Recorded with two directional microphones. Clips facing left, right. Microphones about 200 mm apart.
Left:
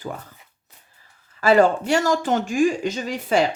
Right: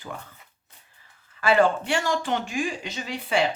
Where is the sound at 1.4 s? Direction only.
40° left (ahead or behind).